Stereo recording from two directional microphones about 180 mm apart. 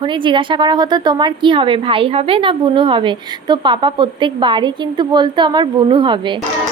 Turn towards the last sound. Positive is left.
turn(degrees=-25)  # may be behind; listen again after turning